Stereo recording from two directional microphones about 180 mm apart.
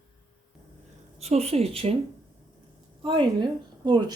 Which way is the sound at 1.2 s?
35° right (ahead or behind).